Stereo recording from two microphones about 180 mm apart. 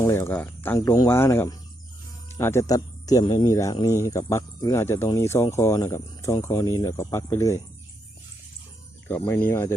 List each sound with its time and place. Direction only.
0.0 s speech: 15° left (ahead or behind)
9.0 s speech: 10° left (ahead or behind)